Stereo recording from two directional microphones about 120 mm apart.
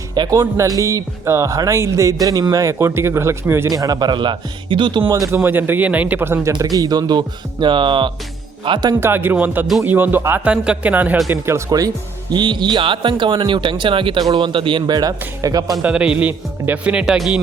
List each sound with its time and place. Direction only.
0.1 s speech: 30° right (ahead or behind)
5.1 s speech: 25° right (ahead or behind)
6.5 s speech: 30° right (ahead or behind)
9.0 s speech: 20° right (ahead or behind)
12.3 s speech: 40° right (ahead or behind)
15.8 s speech: 10° right (ahead or behind)